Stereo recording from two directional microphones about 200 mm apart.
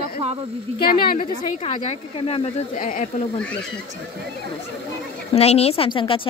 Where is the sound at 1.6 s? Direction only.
30° left (ahead or behind).